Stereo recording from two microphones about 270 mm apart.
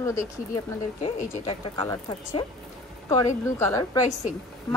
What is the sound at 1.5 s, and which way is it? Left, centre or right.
Speech, centre.